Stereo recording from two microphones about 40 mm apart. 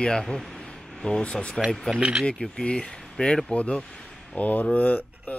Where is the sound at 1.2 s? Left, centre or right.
Left.